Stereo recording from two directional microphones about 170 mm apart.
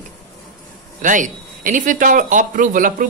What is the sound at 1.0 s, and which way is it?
A man's voice, 50° right (ahead or behind).